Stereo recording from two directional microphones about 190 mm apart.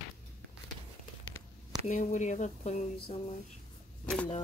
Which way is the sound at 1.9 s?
40° left (ahead or behind).